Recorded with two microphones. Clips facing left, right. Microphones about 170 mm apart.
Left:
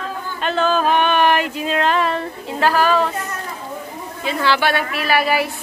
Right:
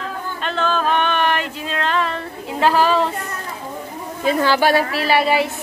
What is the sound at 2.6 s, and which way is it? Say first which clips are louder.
Speech: even; 25° right (ahead or behind).